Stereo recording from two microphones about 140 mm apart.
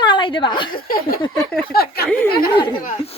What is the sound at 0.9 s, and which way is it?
Speech, 90° left.